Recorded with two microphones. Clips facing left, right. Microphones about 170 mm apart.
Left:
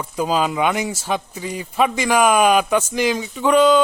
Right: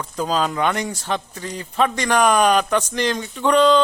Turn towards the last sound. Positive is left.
turn(degrees=5)  # may be behind; listen again after turning